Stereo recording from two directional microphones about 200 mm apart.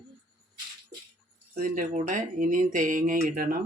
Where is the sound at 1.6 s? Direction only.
40° right (ahead or behind).